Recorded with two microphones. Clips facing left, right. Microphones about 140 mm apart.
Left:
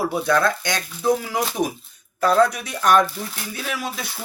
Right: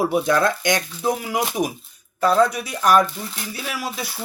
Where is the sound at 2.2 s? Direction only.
Centre (ahead or behind).